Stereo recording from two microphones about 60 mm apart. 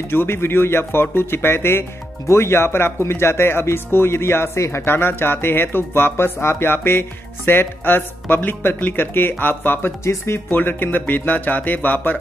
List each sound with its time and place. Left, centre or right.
0.1 s speech: left
10.5 s speech: left